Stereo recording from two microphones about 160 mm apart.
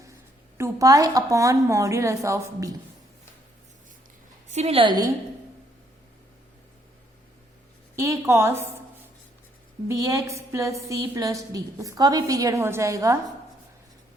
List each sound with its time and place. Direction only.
0.5 s a woman's voice: 20° right (ahead or behind)
4.5 s a woman's voice: 40° right (ahead or behind)
7.9 s a woman's voice: 20° right (ahead or behind)
9.9 s a woman's voice: 20° right (ahead or behind)